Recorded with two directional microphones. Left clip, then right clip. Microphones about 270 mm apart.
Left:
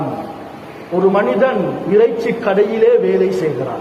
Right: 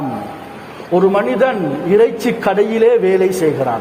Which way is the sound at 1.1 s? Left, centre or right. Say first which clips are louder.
Even; right.